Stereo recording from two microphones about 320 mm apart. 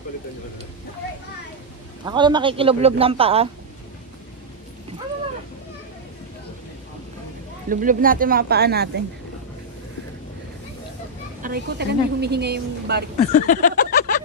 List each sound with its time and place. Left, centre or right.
2.0 s a man's voice: centre
7.7 s speech: right
11.4 s a woman's voice: right
13.2 s a sound: left